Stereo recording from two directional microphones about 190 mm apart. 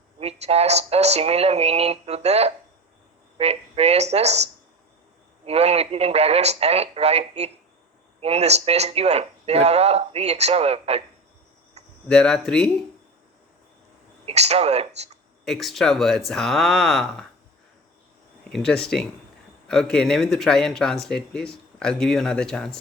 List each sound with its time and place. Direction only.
0.2 s speech: 35° right (ahead or behind)
5.5 s speech: 35° right (ahead or behind)
12.0 s speech: 5° left (ahead or behind)
14.3 s speech: 35° right (ahead or behind)
15.4 s speech: centre (ahead or behind)
18.4 s speech: 5° left (ahead or behind)